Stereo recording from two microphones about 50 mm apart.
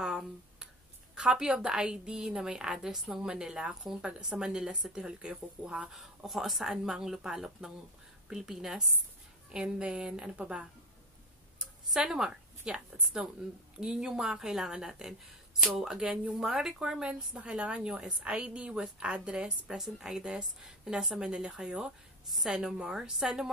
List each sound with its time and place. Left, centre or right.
0.0 s finger snapping: centre
1.1 s a woman's voice: centre
5.9 s a woman's voice: centre
9.5 s a woman's voice: centre
11.9 s a woman's voice: centre